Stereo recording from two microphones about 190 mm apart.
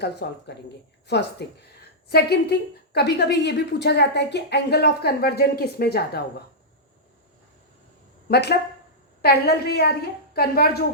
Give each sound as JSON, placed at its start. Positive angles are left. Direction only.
{"t": 0.0, "sound": "a woman's voice", "side_deg": 60}
{"t": 8.3, "sound": "a woman's voice", "side_deg": 60}